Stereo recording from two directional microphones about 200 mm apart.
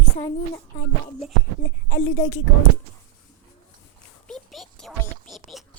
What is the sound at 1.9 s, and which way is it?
Speech, 45° left (ahead or behind).